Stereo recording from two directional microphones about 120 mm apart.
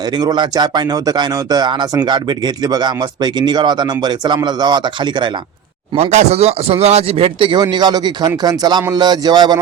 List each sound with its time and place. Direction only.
0.2 s speech: 35° right (ahead or behind)
3.4 s speech: 35° right (ahead or behind)
6.0 s speech: 70° right (ahead or behind); by 9.6 s 35° right (ahead or behind)